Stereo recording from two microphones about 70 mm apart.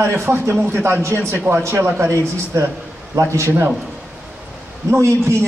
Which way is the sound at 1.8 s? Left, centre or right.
Right.